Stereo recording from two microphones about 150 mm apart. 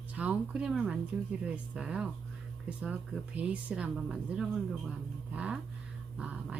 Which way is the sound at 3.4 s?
10° right (ahead or behind).